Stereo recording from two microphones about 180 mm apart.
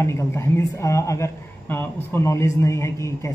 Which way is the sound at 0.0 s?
15° left (ahead or behind).